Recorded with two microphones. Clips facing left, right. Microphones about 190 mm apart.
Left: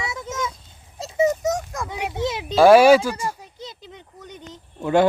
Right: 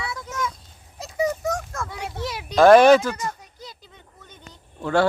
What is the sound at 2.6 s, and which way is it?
Speech, 10° left (ahead or behind).